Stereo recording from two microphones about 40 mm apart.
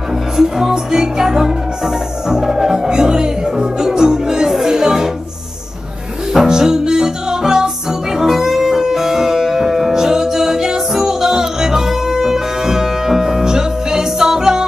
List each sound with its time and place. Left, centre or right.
0.4 s music: centre
6.3 s music: centre